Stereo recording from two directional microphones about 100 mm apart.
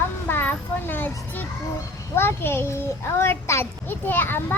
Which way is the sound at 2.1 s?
25° left (ahead or behind).